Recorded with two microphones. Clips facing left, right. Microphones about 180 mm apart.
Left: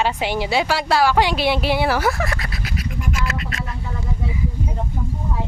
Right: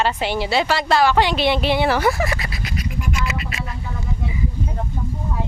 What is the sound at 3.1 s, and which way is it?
Scratch, 5° right (ahead or behind).